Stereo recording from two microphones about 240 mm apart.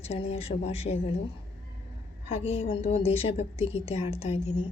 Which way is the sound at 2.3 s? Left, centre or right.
Left.